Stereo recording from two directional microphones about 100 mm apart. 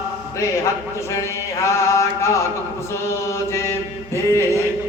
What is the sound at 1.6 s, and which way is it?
Mantra, 30° left (ahead or behind).